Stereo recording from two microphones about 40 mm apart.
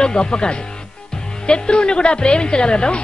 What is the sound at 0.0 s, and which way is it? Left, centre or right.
Speech, centre.